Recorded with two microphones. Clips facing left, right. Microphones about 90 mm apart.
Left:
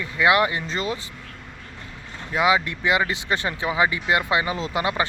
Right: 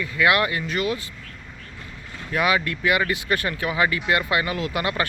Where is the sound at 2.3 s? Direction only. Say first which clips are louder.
Left 2 dB; 20° left (ahead or behind).